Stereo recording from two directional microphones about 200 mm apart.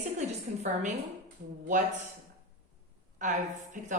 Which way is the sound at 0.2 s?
35° right (ahead or behind).